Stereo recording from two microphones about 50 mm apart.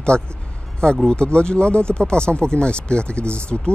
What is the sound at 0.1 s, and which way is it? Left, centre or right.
Speech, centre.